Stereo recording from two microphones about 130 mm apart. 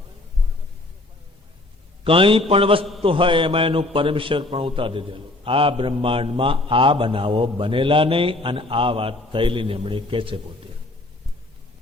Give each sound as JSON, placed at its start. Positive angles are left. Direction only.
{"t": 2.0, "sound": "a man's voice", "side_deg": -45}